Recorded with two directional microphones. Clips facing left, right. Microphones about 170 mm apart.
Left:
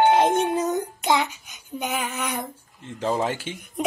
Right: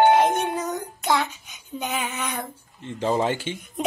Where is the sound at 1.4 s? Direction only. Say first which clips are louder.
Left 1 dB; 5° left (ahead or behind).